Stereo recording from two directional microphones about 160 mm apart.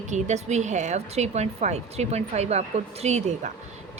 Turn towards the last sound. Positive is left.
turn(degrees=-45)  # may be behind; listen again after turning